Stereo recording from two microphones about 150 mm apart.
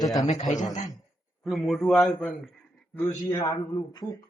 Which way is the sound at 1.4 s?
Centre (ahead or behind).